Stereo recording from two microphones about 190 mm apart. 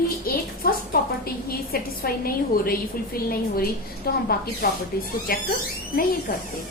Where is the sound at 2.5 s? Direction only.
50° left (ahead or behind).